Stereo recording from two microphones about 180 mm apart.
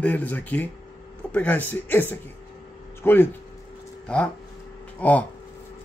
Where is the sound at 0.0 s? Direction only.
10° left (ahead or behind).